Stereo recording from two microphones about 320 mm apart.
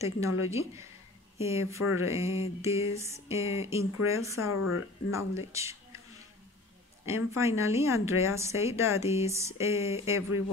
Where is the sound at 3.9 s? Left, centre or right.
Left.